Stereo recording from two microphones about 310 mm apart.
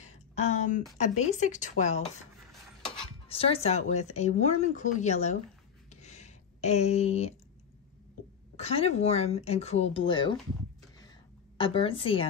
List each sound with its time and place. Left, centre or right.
0.0 s a sound: left
0.9 s speech: left
3.3 s speech: centre
5.9 s a sound: left
8.5 s speech: centre
11.5 s a woman's voice: centre